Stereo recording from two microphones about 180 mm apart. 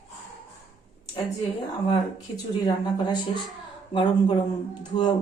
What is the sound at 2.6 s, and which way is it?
Speech, 25° left (ahead or behind).